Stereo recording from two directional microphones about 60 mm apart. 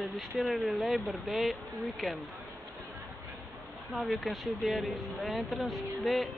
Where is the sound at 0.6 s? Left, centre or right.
Centre.